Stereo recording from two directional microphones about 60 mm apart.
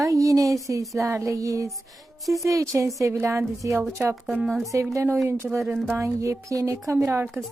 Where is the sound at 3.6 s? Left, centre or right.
Right.